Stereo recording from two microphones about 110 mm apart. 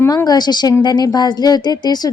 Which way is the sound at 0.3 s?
40° left (ahead or behind).